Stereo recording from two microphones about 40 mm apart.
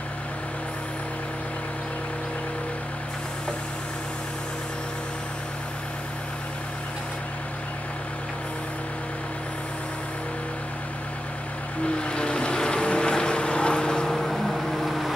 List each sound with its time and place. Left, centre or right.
12.0 s vehicle: left
14.1 s vehicle: centre